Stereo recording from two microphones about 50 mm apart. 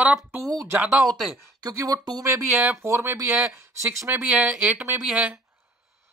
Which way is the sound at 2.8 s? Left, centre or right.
Right.